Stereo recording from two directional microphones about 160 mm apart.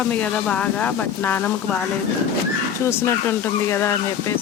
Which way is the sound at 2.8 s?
15° left (ahead or behind).